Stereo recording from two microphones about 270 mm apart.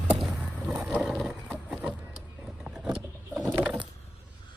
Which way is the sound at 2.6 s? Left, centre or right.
Centre.